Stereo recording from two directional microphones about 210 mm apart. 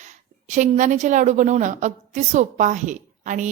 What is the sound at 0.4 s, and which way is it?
A woman's voice, 35° right (ahead or behind).